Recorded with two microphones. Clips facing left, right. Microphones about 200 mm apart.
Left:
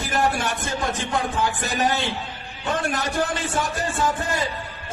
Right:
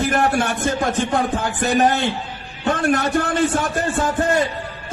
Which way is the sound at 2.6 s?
60° right (ahead or behind).